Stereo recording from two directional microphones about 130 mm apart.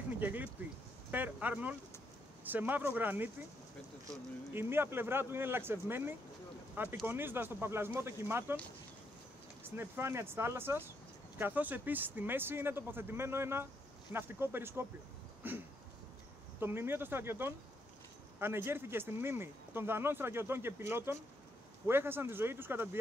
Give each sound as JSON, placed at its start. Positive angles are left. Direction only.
{"t": 0.2, "sound": "speech", "side_deg": -15}
{"t": 4.6, "sound": "speech", "side_deg": -15}
{"t": 9.6, "sound": "speech", "side_deg": -15}